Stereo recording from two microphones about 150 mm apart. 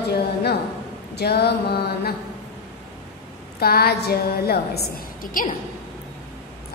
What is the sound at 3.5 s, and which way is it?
A woman's voice, 90° left.